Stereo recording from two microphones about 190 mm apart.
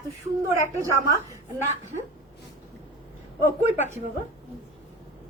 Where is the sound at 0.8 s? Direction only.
15° right (ahead or behind).